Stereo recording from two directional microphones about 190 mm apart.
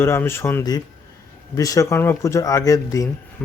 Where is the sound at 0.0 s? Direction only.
10° left (ahead or behind).